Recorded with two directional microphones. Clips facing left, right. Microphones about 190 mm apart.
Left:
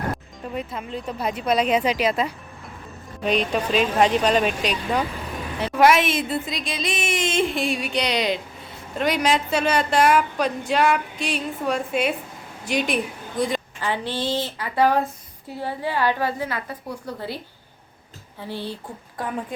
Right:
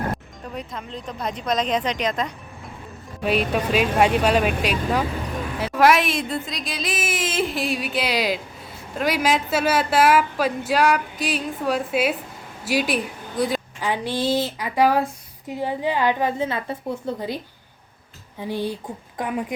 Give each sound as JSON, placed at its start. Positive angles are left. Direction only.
{"t": 0.4, "sound": "speech", "side_deg": 5}
{"t": 3.2, "sound": "a woman's voice", "side_deg": -5}